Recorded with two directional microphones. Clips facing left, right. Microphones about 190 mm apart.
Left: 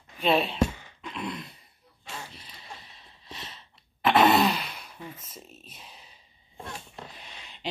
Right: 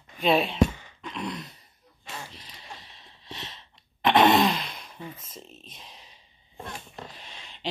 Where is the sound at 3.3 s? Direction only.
10° left (ahead or behind).